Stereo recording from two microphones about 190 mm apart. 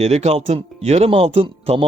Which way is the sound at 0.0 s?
35° right (ahead or behind).